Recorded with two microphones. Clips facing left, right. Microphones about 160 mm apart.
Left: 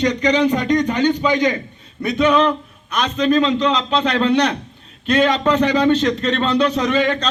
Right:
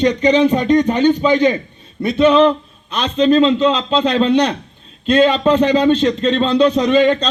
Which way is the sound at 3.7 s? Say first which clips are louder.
Right 3 dB; 10° right (ahead or behind).